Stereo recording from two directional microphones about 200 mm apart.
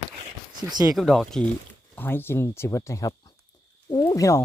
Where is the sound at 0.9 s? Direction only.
Centre (ahead or behind).